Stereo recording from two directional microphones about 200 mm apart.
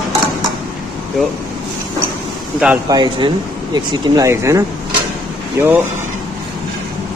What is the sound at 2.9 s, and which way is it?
Speech, 25° right (ahead or behind).